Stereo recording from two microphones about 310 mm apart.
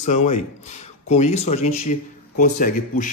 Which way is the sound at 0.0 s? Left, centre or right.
Left.